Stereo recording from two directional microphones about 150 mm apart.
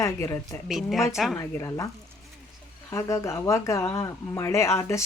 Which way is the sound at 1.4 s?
20° left (ahead or behind).